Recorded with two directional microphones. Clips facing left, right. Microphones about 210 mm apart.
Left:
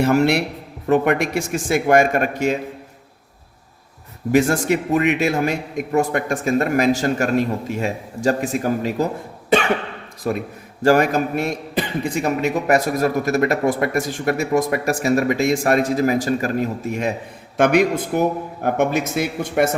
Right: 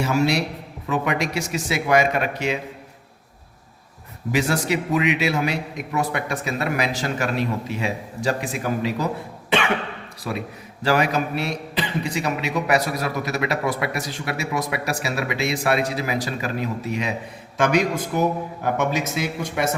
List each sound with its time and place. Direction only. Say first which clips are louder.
0.0 s a man's voice: left 5 dB; 60° left (ahead or behind)
4.3 s a man's voice: left 5 dB; 50° left (ahead or behind)
10.3 s a man's voice: left 5 dB; 45° left (ahead or behind)